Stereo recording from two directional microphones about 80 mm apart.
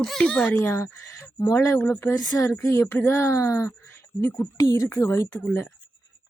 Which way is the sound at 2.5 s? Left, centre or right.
Left.